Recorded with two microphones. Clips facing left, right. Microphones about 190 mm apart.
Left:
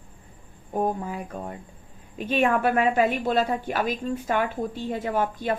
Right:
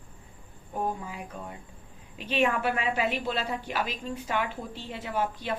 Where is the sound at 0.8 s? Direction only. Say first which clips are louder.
Left 6 dB; 45° left (ahead or behind).